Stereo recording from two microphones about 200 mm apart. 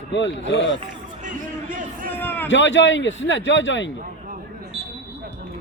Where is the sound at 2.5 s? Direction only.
65° left (ahead or behind).